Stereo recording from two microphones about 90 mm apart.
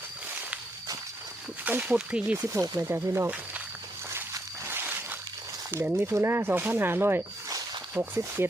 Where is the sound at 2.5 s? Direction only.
35° right (ahead or behind).